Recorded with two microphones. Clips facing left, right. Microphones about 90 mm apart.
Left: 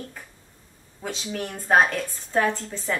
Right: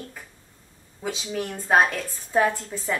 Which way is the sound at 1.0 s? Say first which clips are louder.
Right 2 dB; 5° right (ahead or behind).